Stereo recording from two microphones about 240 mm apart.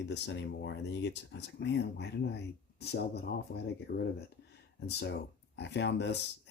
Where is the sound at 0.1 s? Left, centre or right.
Left.